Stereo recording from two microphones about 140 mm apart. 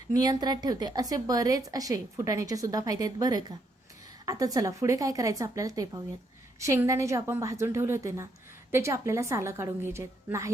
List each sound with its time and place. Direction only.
0.1 s a woman's voice: 30° right (ahead or behind)